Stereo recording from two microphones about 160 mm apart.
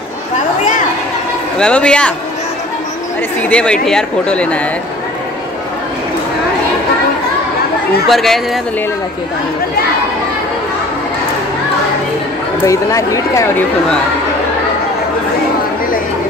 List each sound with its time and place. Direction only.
1.6 s speech: 5° left (ahead or behind)
3.4 s speech: 5° left (ahead or behind)
8.1 s speech: centre (ahead or behind)
12.6 s speech: 20° left (ahead or behind)